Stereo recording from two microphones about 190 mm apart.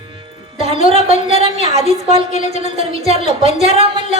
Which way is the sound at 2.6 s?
30° right (ahead or behind).